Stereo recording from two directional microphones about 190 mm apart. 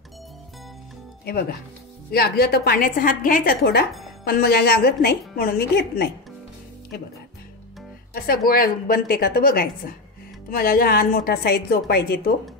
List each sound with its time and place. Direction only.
1.2 s a woman's voice: 55° left (ahead or behind)
8.5 s a woman's voice: 50° left (ahead or behind)